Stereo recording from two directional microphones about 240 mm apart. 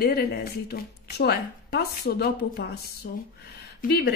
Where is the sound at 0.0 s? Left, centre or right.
Left.